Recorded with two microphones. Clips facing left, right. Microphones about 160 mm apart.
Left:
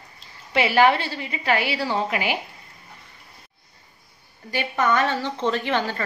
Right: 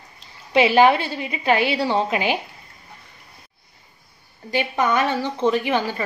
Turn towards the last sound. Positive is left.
turn(degrees=-10)  # may be behind; listen again after turning